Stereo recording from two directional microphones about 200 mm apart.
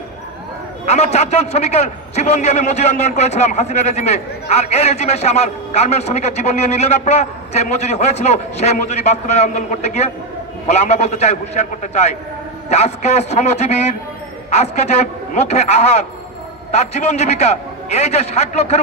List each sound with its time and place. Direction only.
0.8 s a man's voice: 35° left (ahead or behind)